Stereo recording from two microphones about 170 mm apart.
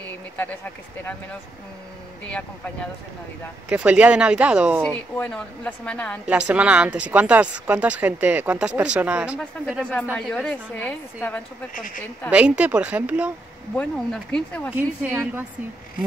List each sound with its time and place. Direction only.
3.6 s speech: 10° right (ahead or behind)
4.8 s a woman's voice: 10° left (ahead or behind)
6.2 s speech: 5° right (ahead or behind)
10.1 s a woman's voice: 5° left (ahead or behind)
11.7 s speech: 50° left (ahead or behind)
12.3 s speech: 5° right (ahead or behind)
13.7 s speech: 5° left (ahead or behind)
14.8 s speech: 10° right (ahead or behind)